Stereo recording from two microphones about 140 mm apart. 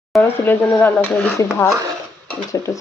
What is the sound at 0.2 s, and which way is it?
Speech, 15° left (ahead or behind).